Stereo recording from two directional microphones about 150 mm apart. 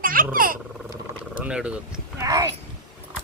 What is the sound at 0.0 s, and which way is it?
Roar, 70° right (ahead or behind).